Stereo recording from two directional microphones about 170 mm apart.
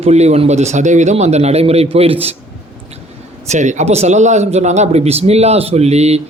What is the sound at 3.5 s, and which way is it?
A man's voice, 45° right (ahead or behind).